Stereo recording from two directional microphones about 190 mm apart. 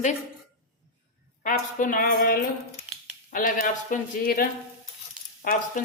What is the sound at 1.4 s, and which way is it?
Speech, 45° left (ahead or behind).